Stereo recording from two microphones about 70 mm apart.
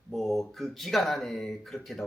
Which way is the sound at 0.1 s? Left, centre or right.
Centre.